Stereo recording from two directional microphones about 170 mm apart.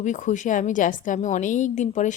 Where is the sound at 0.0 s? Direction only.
45° left (ahead or behind).